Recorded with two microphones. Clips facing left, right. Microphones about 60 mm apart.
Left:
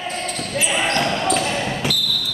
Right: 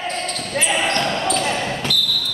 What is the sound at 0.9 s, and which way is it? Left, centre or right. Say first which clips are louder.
Basketball bounce: left 1 dB; centre.